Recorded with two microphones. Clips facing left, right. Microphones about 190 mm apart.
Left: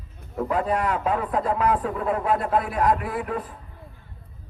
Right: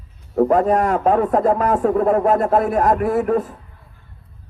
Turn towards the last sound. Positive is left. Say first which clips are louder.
# right 11 dB
turn(degrees=-45)  # may be behind; listen again after turning